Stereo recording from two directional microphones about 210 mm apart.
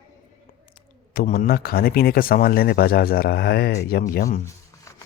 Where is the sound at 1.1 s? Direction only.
45° left (ahead or behind).